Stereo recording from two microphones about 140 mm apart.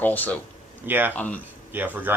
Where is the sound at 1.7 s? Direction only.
15° right (ahead or behind).